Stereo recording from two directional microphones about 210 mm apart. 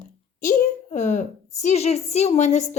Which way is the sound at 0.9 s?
35° left (ahead or behind).